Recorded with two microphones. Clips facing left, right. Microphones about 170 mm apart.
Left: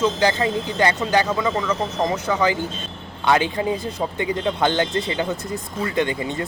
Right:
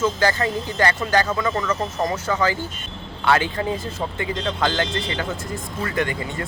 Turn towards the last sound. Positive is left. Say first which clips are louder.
# left 2 dB
turn(degrees=20)  # may be behind; listen again after turning